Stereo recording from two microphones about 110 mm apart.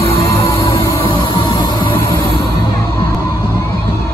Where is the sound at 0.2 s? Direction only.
30° left (ahead or behind).